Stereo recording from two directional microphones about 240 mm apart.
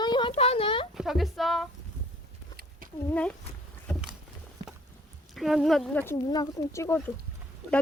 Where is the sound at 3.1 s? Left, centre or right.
Centre.